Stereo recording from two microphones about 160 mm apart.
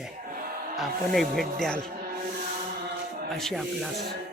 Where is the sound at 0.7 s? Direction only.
Centre (ahead or behind).